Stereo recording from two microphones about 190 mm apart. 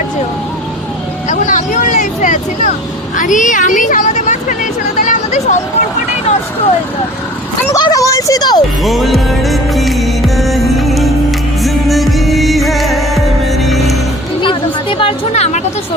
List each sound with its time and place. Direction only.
1.3 s a woman's voice: 40° left (ahead or behind)
7.7 s a sound: 15° left (ahead or behind)
8.8 s music: centre (ahead or behind)
14.4 s a woman's voice: 25° left (ahead or behind)